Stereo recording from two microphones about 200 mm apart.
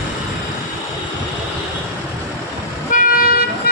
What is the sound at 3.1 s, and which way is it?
Vehicle, 50° left (ahead or behind).